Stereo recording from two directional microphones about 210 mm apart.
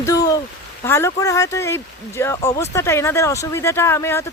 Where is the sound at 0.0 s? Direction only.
15° left (ahead or behind).